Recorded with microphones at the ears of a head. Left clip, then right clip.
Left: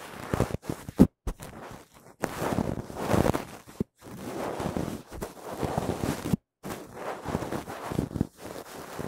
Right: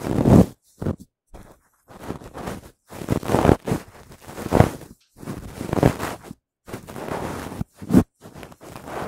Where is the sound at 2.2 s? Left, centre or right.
Left.